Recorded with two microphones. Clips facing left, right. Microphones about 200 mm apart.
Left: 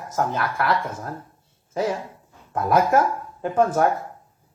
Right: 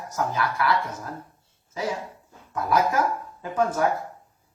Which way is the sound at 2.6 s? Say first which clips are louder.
Left 4 dB; 55° left (ahead or behind).